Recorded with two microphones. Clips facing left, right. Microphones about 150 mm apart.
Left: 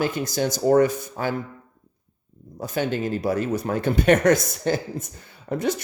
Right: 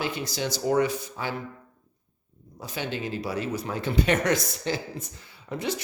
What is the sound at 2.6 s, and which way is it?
Speech, 45° left (ahead or behind).